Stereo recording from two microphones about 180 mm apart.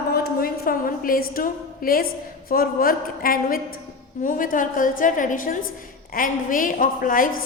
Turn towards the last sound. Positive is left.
turn(degrees=50)  # may be behind; listen again after turning